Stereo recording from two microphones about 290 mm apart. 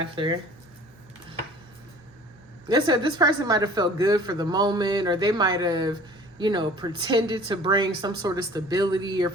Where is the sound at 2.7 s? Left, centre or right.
Centre.